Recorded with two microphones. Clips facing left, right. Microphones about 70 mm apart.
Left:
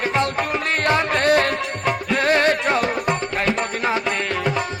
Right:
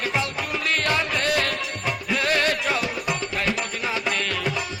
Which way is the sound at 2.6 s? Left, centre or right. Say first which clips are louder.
Left 5 dB; left.